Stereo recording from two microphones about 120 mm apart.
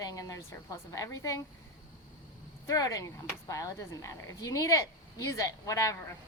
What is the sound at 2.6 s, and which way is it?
Speech, 30° left (ahead or behind).